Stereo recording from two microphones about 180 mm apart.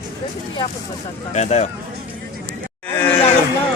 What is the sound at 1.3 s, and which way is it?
Speech, 40° left (ahead or behind).